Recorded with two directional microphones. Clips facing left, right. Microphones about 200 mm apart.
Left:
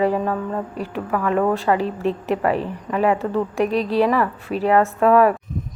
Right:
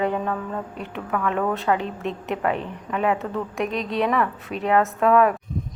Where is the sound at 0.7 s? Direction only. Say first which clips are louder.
Left 4 dB; 35° left (ahead or behind).